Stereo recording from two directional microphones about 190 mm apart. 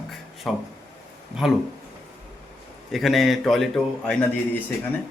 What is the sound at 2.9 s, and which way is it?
Speech, centre (ahead or behind).